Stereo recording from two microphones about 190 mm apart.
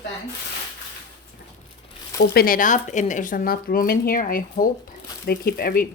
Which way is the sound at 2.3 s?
50° left (ahead or behind).